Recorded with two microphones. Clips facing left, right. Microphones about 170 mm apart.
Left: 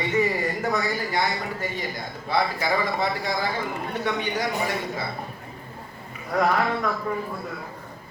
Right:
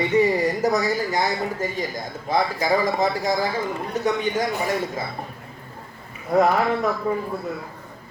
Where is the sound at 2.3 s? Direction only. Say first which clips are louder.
Right 3 dB; 40° right (ahead or behind).